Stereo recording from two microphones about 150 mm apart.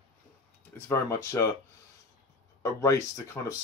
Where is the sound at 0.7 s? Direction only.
15° left (ahead or behind).